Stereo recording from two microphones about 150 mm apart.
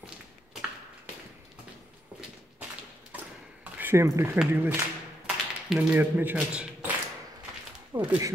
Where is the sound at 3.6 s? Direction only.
15° right (ahead or behind).